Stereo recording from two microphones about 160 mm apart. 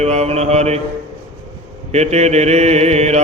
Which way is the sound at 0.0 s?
45° right (ahead or behind).